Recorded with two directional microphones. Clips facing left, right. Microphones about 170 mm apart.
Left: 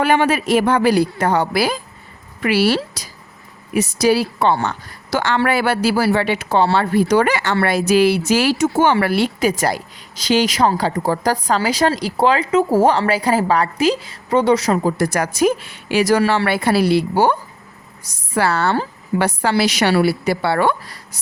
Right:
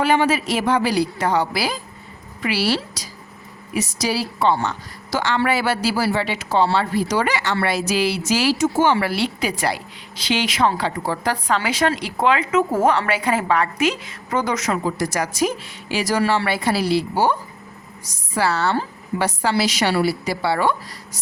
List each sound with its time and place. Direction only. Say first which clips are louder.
0.0 s a woman's voice: left 2 dB; 55° left (ahead or behind); by 14.9 s 35° left (ahead or behind)
14.9 s a woman's voice: left 4 dB; 55° left (ahead or behind)